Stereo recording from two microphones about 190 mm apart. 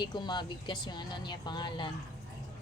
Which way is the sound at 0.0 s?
20° left (ahead or behind).